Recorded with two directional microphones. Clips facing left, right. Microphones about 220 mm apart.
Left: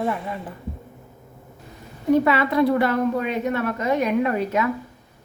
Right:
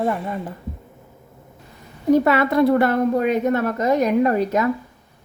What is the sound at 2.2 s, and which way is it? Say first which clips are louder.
A woman's voice: right 3 dB; 45° right (ahead or behind).